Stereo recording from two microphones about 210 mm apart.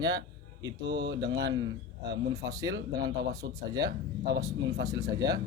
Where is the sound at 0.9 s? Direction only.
55° right (ahead or behind).